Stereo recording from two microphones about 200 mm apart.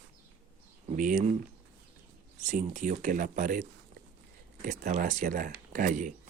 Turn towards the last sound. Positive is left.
turn(degrees=-40)  # may be behind; listen again after turning